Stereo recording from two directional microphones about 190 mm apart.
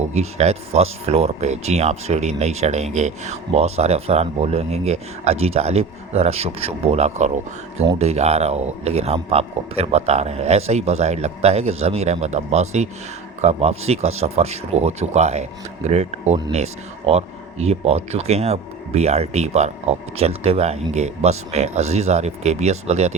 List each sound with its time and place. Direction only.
0.1 s speech: 35° right (ahead or behind)